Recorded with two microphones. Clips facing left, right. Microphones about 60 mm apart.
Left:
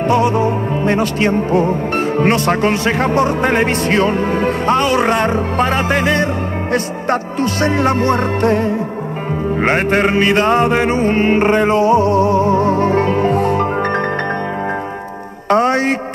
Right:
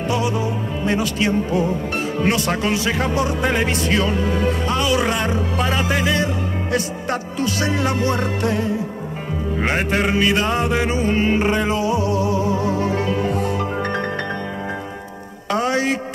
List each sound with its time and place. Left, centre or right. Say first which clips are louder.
0.0 s music: left 8 dB; left
15.4 s music: left 6 dB; left